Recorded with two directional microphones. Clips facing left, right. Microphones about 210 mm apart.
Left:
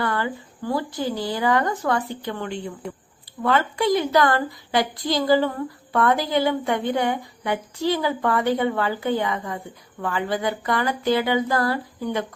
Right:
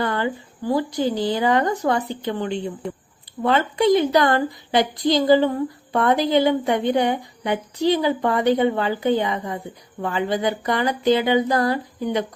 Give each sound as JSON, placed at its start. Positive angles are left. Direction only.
{"t": 0.0, "sound": "a woman's voice", "side_deg": -20}